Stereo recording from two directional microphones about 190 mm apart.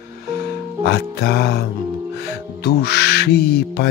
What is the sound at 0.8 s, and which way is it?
Speech, 60° left (ahead or behind).